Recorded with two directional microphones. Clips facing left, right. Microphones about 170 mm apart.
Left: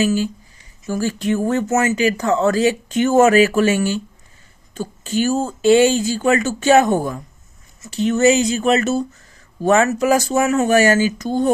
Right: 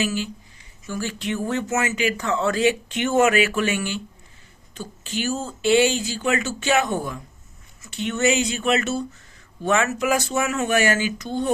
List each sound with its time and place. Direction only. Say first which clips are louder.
0.0 s speech: left 7 dB; 40° left (ahead or behind)